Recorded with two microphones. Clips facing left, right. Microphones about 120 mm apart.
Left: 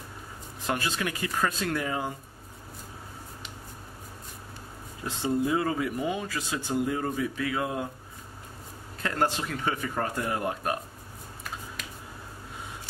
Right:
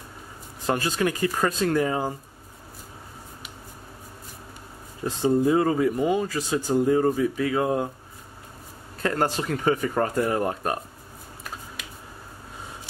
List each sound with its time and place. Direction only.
0.7 s speech: 40° right (ahead or behind)
5.0 s speech: 35° right (ahead or behind)
9.0 s speech: 40° right (ahead or behind)